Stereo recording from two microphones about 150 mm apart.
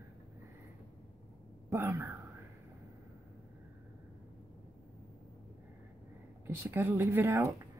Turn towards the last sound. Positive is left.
turn(degrees=-20)  # may be behind; listen again after turning